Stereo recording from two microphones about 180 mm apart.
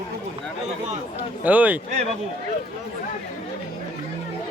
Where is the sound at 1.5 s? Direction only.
10° right (ahead or behind).